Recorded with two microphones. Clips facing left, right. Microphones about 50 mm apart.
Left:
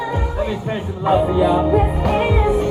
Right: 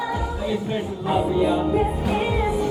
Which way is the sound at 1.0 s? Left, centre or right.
Left.